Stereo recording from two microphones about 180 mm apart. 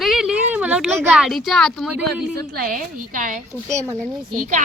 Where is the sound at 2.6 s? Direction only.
55° right (ahead or behind).